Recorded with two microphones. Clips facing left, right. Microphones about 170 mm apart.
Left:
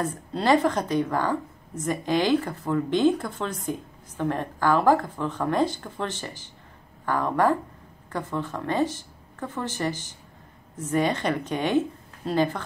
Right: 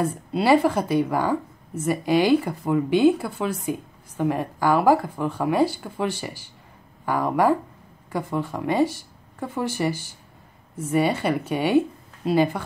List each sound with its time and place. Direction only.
0.0 s speech: 10° right (ahead or behind)